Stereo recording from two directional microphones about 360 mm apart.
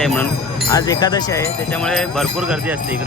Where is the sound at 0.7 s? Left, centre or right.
Centre.